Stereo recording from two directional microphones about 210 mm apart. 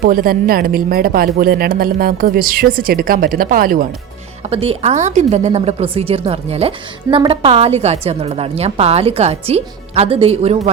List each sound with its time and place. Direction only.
0.0 s speech: 45° right (ahead or behind)
4.4 s a woman's voice: 30° right (ahead or behind)